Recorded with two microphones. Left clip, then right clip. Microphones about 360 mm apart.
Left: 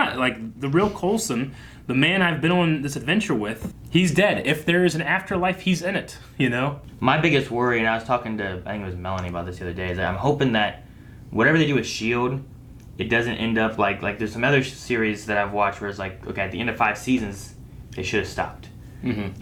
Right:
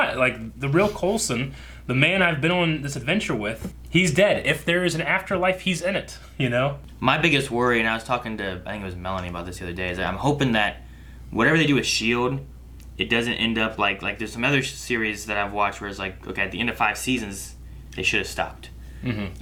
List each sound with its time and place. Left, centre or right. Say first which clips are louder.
0.0 s speech: right 1 dB; right
6.3 s speech: even; right
7.0 s speech: even; left
19.0 s speech: left 2 dB; right